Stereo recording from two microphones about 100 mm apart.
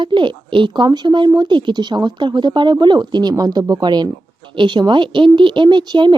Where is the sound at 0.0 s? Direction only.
55° right (ahead or behind).